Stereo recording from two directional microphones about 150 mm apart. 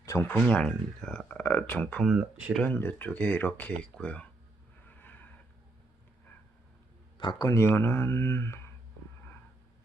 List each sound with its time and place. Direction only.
0.0 s a sound: 20° left (ahead or behind)
0.3 s speech: 10° left (ahead or behind)
2.0 s speech: 5° right (ahead or behind)
2.6 s speech: 10° left (ahead or behind)
4.9 s a sound: 10° left (ahead or behind)
7.2 s speech: 30° left (ahead or behind)